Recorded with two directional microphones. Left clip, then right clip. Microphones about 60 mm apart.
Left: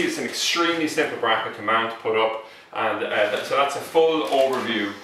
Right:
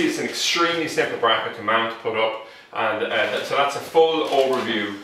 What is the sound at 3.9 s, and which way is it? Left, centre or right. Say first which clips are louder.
Speech: right 2 dB; centre.